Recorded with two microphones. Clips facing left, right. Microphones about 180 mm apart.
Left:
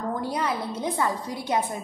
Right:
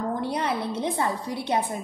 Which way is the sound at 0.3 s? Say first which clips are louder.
Right 1 dB; 30° right (ahead or behind).